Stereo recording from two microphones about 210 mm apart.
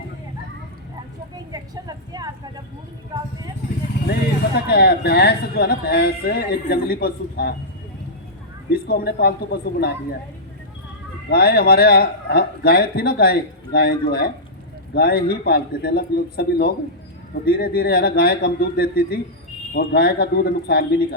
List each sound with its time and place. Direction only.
1.5 s a sound: 20° right (ahead or behind)
4.7 s a man's voice: 50° left (ahead or behind)
8.7 s a man's voice: 50° left (ahead or behind)
11.3 s a man's voice: 50° left (ahead or behind)